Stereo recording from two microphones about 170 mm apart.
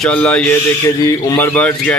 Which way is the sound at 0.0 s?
5° left (ahead or behind).